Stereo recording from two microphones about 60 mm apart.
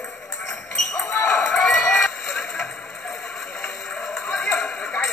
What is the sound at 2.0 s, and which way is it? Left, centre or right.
Music, centre.